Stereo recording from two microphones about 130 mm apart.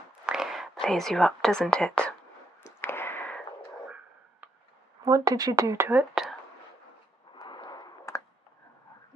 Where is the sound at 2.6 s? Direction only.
20° left (ahead or behind).